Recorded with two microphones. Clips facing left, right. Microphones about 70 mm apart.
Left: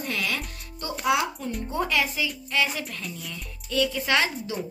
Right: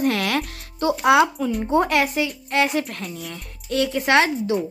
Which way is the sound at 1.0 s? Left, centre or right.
Right.